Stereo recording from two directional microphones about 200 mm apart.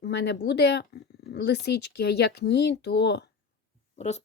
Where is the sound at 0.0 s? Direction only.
55° left (ahead or behind).